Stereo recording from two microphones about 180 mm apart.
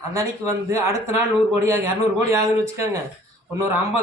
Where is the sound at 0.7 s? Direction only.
15° right (ahead or behind).